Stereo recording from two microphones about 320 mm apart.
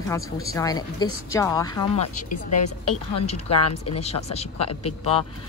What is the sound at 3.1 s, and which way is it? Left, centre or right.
Speech, centre.